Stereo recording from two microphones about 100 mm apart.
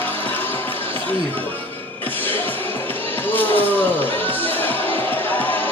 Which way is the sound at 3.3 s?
20° left (ahead or behind).